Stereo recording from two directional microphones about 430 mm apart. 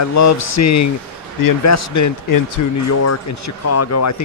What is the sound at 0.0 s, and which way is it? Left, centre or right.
Speech, left.